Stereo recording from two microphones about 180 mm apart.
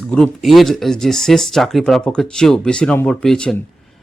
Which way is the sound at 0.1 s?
Centre (ahead or behind).